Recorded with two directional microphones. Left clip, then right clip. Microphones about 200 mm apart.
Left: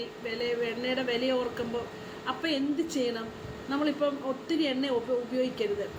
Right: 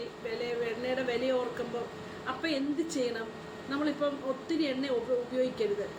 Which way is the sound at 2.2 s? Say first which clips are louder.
Left 2 dB; 15° left (ahead or behind).